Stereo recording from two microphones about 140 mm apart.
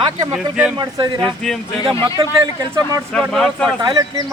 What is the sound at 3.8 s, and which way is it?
Speech, 30° right (ahead or behind).